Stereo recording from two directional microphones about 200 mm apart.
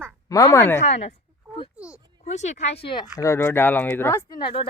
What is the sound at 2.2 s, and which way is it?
Speech, 35° left (ahead or behind).